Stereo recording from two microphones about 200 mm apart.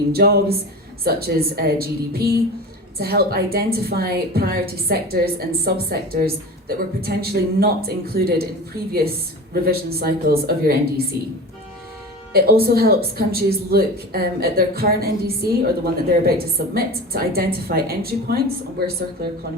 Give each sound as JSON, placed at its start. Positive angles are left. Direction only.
{"t": 0.1, "sound": "a woman's voice", "side_deg": -50}
{"t": 12.3, "sound": "a woman's voice", "side_deg": -50}